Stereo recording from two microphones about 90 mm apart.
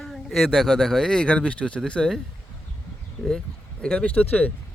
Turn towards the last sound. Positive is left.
turn(degrees=15)  # may be behind; listen again after turning